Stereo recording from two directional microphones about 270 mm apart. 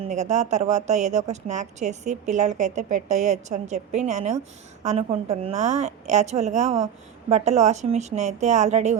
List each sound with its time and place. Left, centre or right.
0.0 s a woman's voice: right